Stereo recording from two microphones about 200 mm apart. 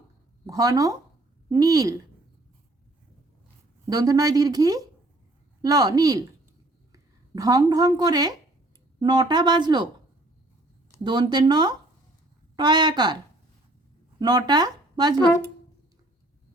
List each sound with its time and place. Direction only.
0.4 s a woman's voice: 20° right (ahead or behind)
3.8 s a woman's voice: 20° right (ahead or behind)
11.0 s a woman's voice: 20° right (ahead or behind)
14.2 s speech: 20° right (ahead or behind)